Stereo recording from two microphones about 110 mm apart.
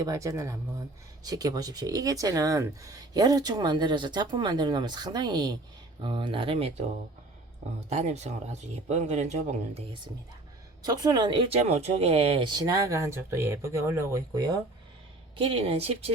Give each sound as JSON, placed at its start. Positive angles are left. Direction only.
{"t": 0.0, "sound": "speech", "side_deg": -30}
{"t": 7.9, "sound": "speech", "side_deg": -85}
{"t": 10.8, "sound": "speech", "side_deg": -35}
{"t": 12.5, "sound": "speech", "side_deg": -35}
{"t": 15.4, "sound": "speech", "side_deg": -65}